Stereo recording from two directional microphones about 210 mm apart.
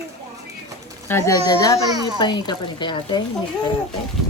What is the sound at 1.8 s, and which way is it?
Speech, 20° right (ahead or behind).